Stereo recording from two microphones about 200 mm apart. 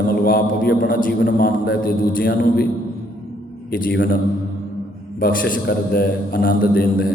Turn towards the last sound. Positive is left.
turn(degrees=45)  # may be behind; listen again after turning